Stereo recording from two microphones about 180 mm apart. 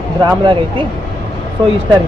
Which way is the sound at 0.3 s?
25° right (ahead or behind).